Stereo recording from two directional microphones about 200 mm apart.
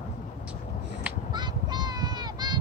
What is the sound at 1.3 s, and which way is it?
Honk, 20° right (ahead or behind).